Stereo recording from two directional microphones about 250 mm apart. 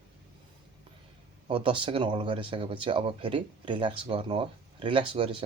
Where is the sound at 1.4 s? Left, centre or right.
Right.